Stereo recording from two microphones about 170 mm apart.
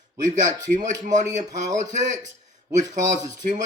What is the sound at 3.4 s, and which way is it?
Speech, 45° right (ahead or behind).